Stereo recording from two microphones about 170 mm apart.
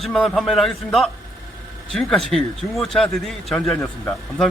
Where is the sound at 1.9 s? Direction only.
Centre (ahead or behind).